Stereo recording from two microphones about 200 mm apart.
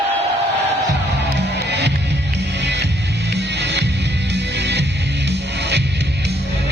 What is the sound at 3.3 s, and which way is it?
Music, 60° right (ahead or behind).